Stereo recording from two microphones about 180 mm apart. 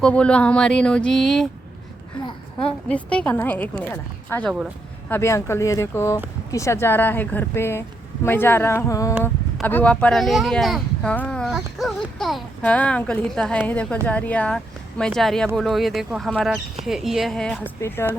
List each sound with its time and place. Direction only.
0.0 s speech: 5° left (ahead or behind)
2.6 s speech: 5° left (ahead or behind)
17.7 s speech: 15° left (ahead or behind)